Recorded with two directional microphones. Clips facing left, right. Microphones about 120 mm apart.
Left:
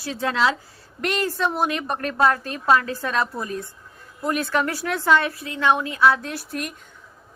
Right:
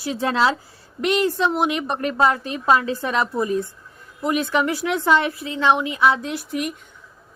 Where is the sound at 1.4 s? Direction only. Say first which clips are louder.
Right 3 dB; centre (ahead or behind).